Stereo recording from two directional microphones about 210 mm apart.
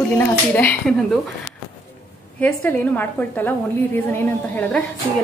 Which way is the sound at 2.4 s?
10° left (ahead or behind).